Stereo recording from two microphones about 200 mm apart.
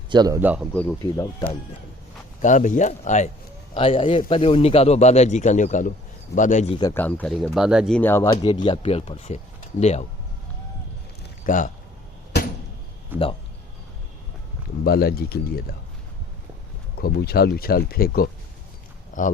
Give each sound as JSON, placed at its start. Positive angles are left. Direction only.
{"t": 0.1, "sound": "speech", "side_deg": -20}
{"t": 0.7, "sound": "speech", "side_deg": 10}
{"t": 2.4, "sound": "speech", "side_deg": 40}
{"t": 6.7, "sound": "speech", "side_deg": 15}
{"t": 8.3, "sound": "speech", "side_deg": 20}
{"t": 11.4, "sound": "speech", "side_deg": 40}
{"t": 13.1, "sound": "speech", "side_deg": -10}
{"t": 14.8, "sound": "speech", "side_deg": 50}
{"t": 17.0, "sound": "speech", "side_deg": 50}